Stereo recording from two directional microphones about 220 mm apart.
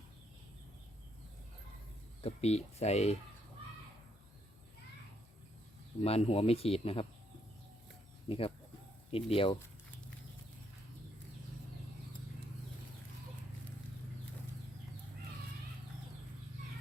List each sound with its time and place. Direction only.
2.2 s speech: 30° left (ahead or behind)
6.0 s speech: 25° left (ahead or behind)
8.3 s speech: 25° left (ahead or behind)